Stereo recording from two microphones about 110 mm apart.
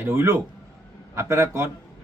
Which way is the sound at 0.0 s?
20° right (ahead or behind).